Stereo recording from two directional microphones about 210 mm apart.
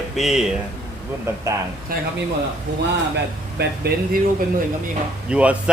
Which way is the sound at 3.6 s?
45° right (ahead or behind).